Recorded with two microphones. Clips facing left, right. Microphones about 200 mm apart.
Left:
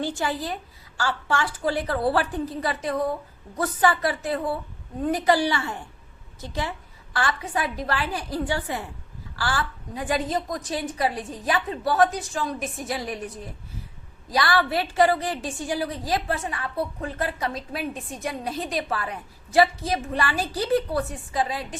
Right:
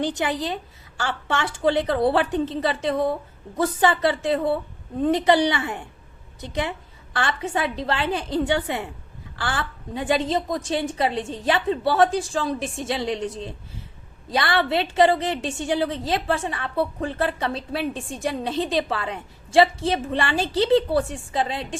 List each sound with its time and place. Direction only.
0.0 s a woman's voice: 20° right (ahead or behind)